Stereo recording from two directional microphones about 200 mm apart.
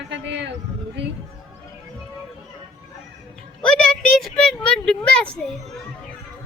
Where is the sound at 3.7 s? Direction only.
5° left (ahead or behind).